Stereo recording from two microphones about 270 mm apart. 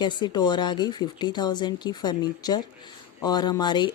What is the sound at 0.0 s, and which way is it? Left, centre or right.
Speech, centre.